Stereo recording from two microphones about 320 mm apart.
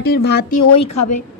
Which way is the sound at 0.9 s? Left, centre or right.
Left.